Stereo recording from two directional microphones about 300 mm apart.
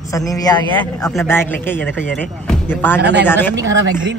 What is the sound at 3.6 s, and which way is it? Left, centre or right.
Speech, right.